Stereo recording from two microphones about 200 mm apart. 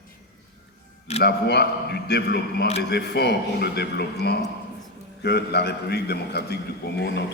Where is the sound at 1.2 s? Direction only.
55° left (ahead or behind).